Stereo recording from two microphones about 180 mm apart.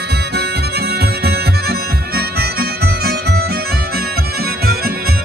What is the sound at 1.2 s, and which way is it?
Music, 60° right (ahead or behind).